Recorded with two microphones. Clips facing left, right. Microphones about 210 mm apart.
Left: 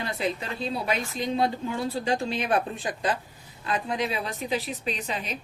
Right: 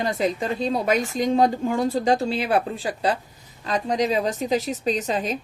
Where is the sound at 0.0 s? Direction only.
45° right (ahead or behind).